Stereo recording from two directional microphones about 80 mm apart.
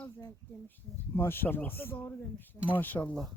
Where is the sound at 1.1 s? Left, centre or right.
Left.